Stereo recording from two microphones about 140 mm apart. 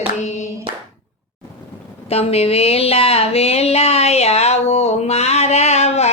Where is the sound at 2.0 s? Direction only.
45° left (ahead or behind).